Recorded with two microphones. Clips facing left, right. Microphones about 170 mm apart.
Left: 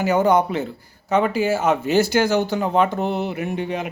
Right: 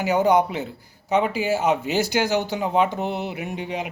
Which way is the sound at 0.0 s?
15° right (ahead or behind).